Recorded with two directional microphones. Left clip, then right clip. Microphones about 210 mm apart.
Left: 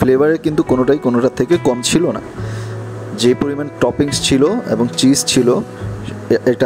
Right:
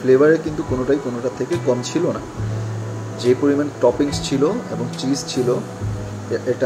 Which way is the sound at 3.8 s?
45° left (ahead or behind).